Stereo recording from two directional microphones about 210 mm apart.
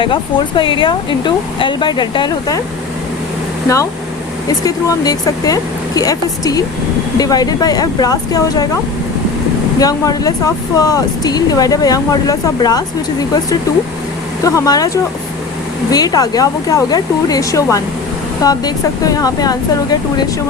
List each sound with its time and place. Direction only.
0.0 s speech: 25° left (ahead or behind)
4.4 s speech: 15° left (ahead or behind)
9.8 s speech: 15° left (ahead or behind)